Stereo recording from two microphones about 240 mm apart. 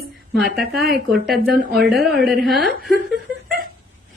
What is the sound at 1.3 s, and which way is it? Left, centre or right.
Speech, right.